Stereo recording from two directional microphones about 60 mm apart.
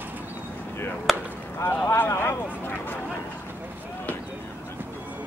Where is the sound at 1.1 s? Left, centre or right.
Centre.